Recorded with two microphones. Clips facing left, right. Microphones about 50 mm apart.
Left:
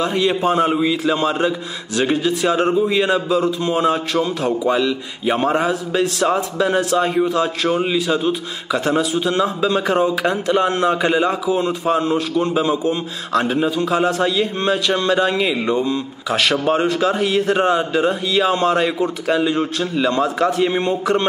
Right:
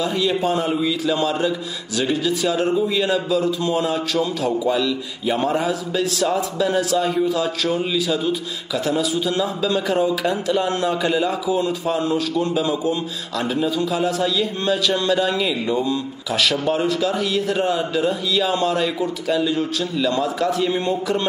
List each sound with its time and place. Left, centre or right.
0.0 s a man's voice: left
5.4 s a man's voice: left